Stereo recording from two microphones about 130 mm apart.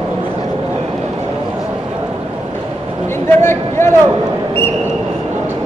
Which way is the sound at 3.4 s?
20° left (ahead or behind).